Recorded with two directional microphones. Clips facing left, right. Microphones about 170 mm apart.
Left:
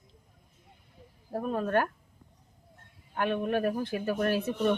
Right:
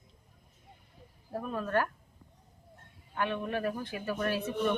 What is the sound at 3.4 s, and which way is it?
A man's voice, 35° left (ahead or behind).